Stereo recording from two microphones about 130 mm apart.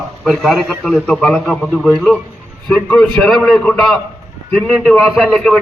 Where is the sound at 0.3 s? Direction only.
Centre (ahead or behind).